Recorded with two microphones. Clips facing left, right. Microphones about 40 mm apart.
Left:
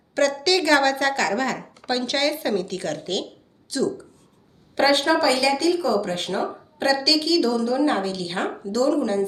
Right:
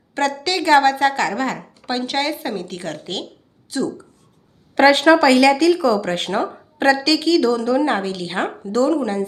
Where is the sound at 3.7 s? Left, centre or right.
Right.